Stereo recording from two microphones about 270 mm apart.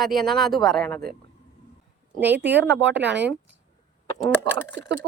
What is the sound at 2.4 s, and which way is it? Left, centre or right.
Speech, right.